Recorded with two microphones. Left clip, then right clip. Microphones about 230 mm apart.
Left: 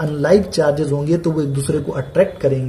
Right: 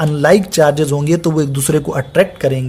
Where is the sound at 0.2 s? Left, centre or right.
Right.